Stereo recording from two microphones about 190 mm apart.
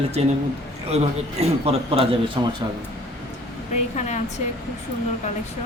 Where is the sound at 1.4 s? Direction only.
30° right (ahead or behind).